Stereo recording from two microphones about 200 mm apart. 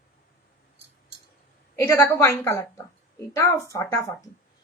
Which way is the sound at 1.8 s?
10° left (ahead or behind).